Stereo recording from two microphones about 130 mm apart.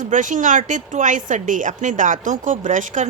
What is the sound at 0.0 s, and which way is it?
A woman's voice, 75° right (ahead or behind).